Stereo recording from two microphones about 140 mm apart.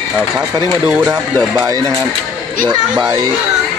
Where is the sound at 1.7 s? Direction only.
25° right (ahead or behind).